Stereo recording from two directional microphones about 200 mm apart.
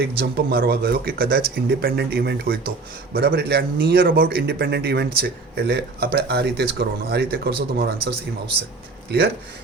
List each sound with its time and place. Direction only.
0.2 s speech: 50° right (ahead or behind)
9.0 s speech: 55° right (ahead or behind)